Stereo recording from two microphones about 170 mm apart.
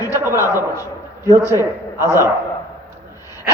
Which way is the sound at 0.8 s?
20° left (ahead or behind).